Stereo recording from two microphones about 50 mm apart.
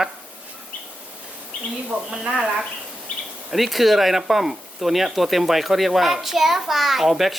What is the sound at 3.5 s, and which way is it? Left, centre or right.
Speech, centre.